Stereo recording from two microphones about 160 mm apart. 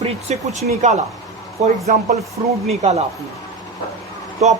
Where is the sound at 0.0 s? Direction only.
45° right (ahead or behind).